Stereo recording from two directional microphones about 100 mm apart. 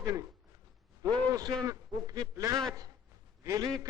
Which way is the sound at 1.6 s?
35° right (ahead or behind).